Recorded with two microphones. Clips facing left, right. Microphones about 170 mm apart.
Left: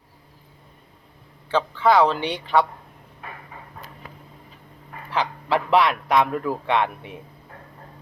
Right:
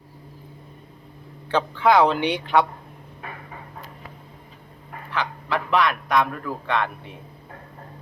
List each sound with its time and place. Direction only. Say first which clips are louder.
1.5 s speech: even; centre (ahead or behind)
5.1 s a man's voice: left 3 dB; 30° left (ahead or behind)